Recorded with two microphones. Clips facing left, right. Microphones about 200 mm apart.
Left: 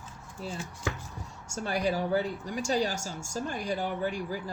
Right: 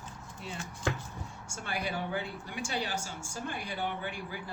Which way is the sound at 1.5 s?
40° left (ahead or behind).